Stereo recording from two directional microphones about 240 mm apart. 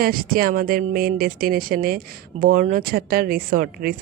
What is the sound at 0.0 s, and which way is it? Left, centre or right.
Speech, right.